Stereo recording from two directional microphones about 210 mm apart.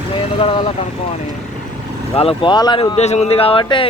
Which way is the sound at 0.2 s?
25° left (ahead or behind).